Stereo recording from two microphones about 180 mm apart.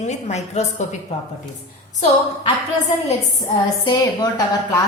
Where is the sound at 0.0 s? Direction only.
40° left (ahead or behind).